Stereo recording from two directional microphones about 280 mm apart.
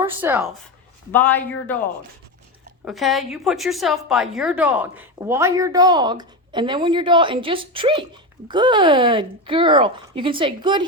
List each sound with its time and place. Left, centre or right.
0.0 s a woman's voice: centre
1.1 s speech: centre
2.8 s a woman's voice: centre